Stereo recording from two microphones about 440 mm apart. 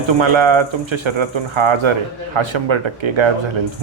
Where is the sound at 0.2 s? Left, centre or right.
Right.